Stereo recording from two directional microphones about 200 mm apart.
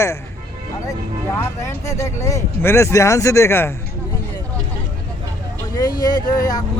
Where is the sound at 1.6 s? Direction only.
15° left (ahead or behind).